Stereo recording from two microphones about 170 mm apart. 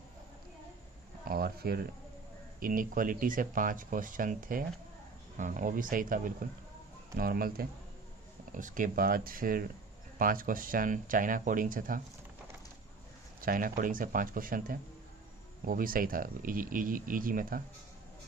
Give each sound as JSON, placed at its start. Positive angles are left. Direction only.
{"t": 1.2, "sound": "a sound", "side_deg": -60}
{"t": 2.6, "sound": "speech", "side_deg": -55}
{"t": 13.4, "sound": "speech", "side_deg": -55}